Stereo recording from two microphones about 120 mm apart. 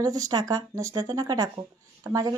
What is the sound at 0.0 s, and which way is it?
Speech, 30° right (ahead or behind).